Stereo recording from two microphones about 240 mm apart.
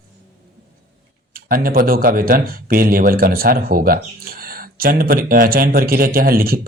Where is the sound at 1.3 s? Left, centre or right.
Right.